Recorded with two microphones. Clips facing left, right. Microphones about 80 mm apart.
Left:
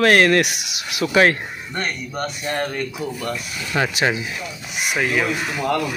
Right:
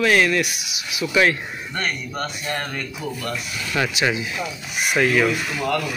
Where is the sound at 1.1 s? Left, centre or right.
Left.